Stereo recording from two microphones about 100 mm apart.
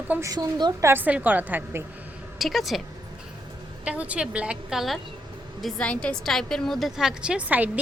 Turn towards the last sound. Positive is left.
turn(degrees=-15)  # may be behind; listen again after turning